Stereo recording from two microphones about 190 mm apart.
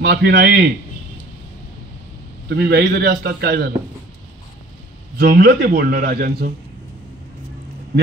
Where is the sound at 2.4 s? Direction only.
55° right (ahead or behind).